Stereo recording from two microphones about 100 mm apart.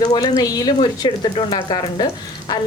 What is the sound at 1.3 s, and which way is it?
Speech, 60° left (ahead or behind).